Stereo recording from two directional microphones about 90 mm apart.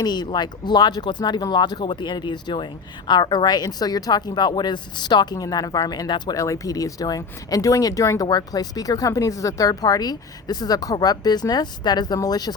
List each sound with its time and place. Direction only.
0.0 s speech: 55° left (ahead or behind)
6.3 s speech: 40° left (ahead or behind)